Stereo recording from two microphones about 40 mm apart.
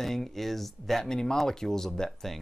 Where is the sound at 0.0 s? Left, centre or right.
Centre.